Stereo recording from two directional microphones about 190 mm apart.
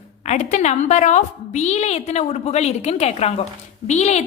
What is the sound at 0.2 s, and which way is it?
A woman's voice, 35° left (ahead or behind).